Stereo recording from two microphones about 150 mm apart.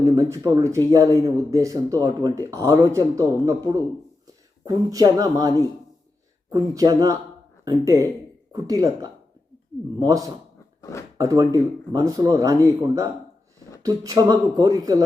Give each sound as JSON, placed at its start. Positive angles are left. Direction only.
{"t": 0.0, "sound": "speech", "side_deg": -20}
{"t": 10.8, "sound": "a sound", "side_deg": 20}
{"t": 11.2, "sound": "speech", "side_deg": -25}